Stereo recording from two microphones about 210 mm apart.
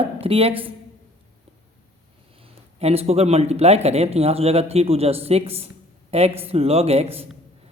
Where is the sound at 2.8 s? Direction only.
30° right (ahead or behind).